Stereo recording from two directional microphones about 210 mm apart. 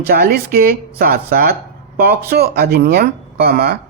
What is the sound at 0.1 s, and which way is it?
Speech, 45° right (ahead or behind).